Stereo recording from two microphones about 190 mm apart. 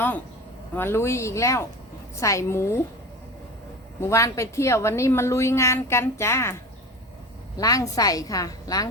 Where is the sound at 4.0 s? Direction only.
15° left (ahead or behind).